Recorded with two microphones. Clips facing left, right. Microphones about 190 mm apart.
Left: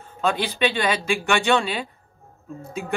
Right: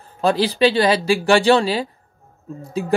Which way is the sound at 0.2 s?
35° right (ahead or behind).